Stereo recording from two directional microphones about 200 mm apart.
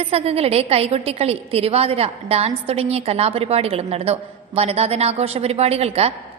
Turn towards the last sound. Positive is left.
turn(degrees=-30)  # may be behind; listen again after turning